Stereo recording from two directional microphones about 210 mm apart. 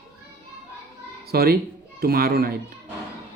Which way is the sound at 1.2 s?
50° right (ahead or behind).